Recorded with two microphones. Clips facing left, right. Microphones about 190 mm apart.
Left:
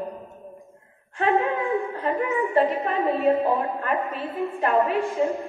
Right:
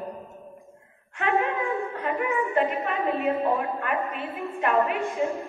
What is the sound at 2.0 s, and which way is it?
A woman's voice, 35° left (ahead or behind).